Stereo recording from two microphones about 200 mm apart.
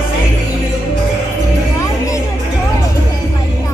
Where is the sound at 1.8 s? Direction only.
15° left (ahead or behind).